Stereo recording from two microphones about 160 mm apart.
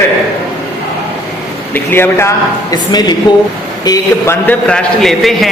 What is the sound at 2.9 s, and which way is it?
A man's voice, 25° left (ahead or behind).